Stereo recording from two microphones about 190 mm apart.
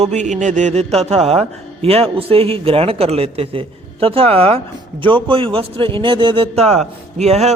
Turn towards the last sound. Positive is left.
turn(degrees=-35)  # may be behind; listen again after turning